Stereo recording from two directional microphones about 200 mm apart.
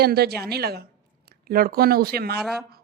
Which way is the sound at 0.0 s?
50° right (ahead or behind).